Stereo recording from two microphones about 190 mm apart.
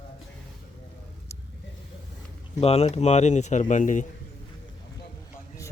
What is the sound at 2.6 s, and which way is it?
Speech, 35° left (ahead or behind).